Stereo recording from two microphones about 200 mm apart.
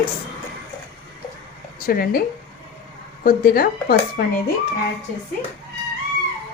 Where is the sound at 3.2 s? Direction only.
50° left (ahead or behind).